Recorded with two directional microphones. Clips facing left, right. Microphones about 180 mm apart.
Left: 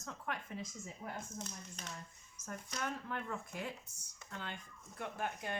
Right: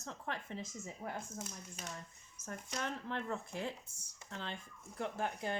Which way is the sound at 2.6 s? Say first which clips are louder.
Right 1 dB; 30° right (ahead or behind).